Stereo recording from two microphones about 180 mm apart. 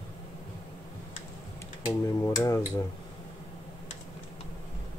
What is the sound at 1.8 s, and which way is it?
Speech, 20° left (ahead or behind).